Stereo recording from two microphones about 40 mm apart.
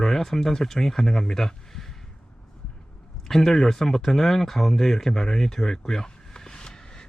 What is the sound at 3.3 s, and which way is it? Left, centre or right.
Speech, centre.